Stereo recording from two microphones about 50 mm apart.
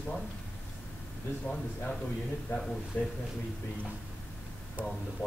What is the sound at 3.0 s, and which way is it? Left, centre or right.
Speech, left.